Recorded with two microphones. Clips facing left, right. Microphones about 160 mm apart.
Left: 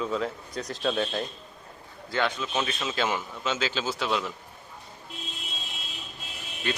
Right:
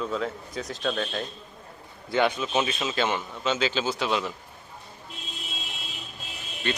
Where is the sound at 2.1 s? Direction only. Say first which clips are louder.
Right 4 dB; 15° right (ahead or behind).